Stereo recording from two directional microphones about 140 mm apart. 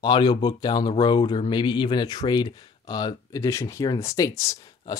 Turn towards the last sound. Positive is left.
turn(degrees=25)  # may be behind; listen again after turning